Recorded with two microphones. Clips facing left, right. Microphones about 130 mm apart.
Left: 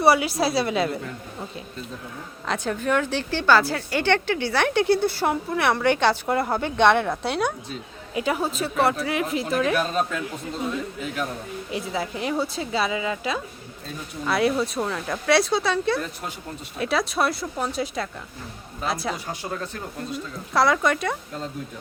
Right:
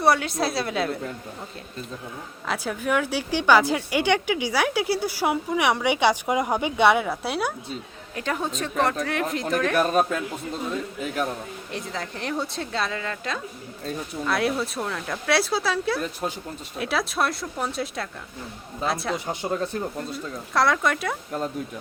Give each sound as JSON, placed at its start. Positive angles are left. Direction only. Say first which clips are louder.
{"t": 0.0, "sound": "speech", "louder": "left 2 dB", "side_deg": 5}
{"t": 2.5, "sound": "a woman's voice", "louder": "left 1 dB", "side_deg": -5}
{"t": 8.1, "sound": "speech", "louder": "left 3 dB", "side_deg": 10}
{"t": 9.7, "sound": "a man's voice", "louder": "right 3 dB", "side_deg": -50}
{"t": 11.7, "sound": "speech", "louder": "left 5 dB", "side_deg": 5}
{"t": 19.1, "sound": "speech", "louder": "right 4 dB", "side_deg": -20}
{"t": 20.5, "sound": "speech", "louder": "left 2 dB", "side_deg": 0}